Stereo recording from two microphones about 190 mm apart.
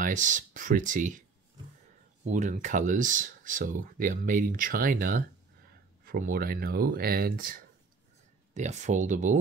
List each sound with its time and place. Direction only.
0.0 s speech: 40° right (ahead or behind)
2.2 s speech: 40° right (ahead or behind)
8.5 s speech: 40° right (ahead or behind)